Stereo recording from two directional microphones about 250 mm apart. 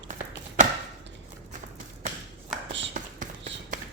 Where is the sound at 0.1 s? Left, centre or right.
Right.